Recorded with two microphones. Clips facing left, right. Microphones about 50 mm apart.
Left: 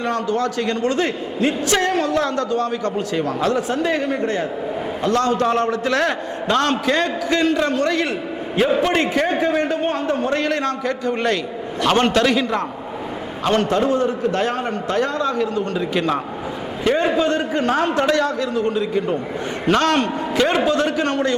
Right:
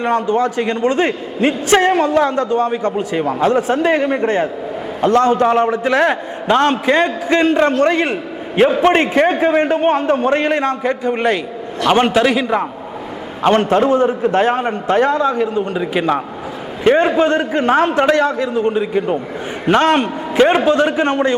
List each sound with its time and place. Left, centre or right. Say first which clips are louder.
0.0 s a man's voice: right 5 dB; right
13.4 s a man's voice: right 5 dB; right
16.8 s a man's voice: right 5 dB; right